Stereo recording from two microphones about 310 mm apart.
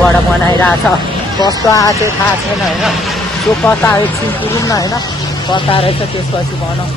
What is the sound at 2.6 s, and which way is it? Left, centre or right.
Speech, centre.